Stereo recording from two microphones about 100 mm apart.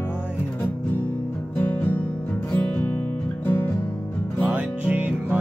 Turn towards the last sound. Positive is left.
turn(degrees=-15)  # may be behind; listen again after turning